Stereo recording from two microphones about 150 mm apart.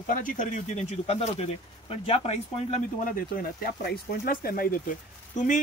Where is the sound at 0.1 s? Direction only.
60° left (ahead or behind); by 2.8 s 45° left (ahead or behind).